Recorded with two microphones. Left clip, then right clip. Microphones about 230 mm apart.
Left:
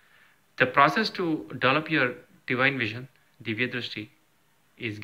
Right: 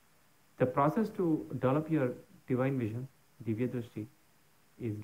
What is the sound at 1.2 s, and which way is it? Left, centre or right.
Speech, left.